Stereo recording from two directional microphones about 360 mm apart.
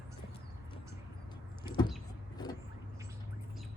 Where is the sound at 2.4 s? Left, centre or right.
Centre.